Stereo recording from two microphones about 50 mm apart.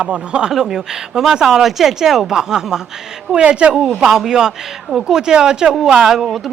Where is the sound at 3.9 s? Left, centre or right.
Centre.